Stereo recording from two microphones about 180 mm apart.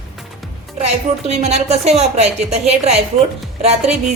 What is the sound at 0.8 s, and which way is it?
A woman's voice, 35° right (ahead or behind).